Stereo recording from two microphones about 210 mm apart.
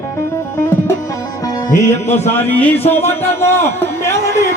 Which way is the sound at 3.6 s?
10° left (ahead or behind).